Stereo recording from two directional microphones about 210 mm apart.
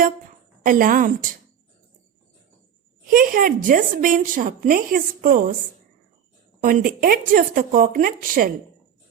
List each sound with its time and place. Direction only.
0.6 s speech: 40° right (ahead or behind)
3.1 s speech: 40° right (ahead or behind)
6.6 s speech: 40° right (ahead or behind)